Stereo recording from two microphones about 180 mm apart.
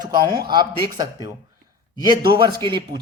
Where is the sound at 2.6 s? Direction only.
25° right (ahead or behind).